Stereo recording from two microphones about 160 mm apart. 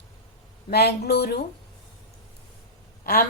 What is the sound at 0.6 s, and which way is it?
Speech, 90° left.